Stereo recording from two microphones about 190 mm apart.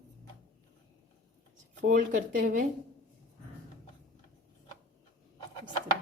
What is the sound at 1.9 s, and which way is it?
Speech, 45° right (ahead or behind).